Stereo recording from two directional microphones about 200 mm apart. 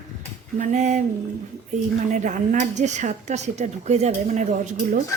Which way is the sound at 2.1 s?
40° right (ahead or behind).